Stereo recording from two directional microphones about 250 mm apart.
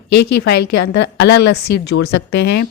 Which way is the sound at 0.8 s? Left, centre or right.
Left.